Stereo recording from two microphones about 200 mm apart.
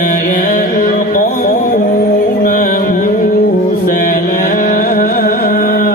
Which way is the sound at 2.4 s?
45° left (ahead or behind).